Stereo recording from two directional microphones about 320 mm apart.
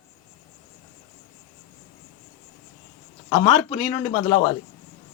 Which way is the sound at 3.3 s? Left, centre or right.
Centre.